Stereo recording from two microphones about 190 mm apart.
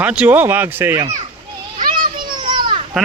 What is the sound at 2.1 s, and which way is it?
Children playing, 25° right (ahead or behind).